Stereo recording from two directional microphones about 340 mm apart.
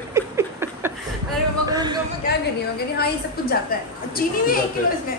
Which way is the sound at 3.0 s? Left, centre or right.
Left.